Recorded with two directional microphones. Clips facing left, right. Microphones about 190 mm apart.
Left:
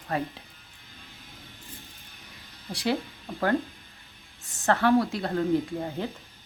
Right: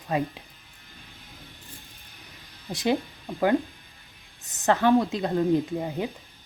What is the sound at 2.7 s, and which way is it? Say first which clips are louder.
Speech: right 3 dB; 20° right (ahead or behind).